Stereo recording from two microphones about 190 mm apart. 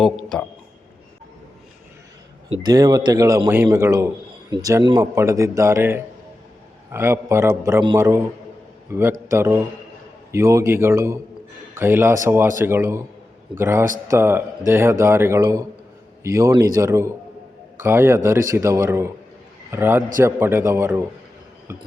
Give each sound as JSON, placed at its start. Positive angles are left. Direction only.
{"t": 0.0, "sound": "speech", "side_deg": 0}
{"t": 2.5, "sound": "a man's voice", "side_deg": -20}